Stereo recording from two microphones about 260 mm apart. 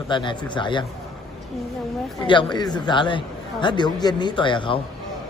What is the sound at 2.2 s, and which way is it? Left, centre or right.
A man's voice, centre.